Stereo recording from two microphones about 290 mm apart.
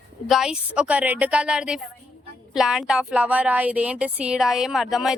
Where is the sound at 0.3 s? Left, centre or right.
Centre.